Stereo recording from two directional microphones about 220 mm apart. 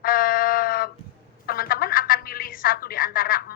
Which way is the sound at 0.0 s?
40° left (ahead or behind).